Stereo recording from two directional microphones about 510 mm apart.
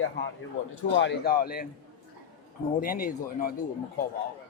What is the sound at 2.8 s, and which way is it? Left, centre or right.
Speech, centre.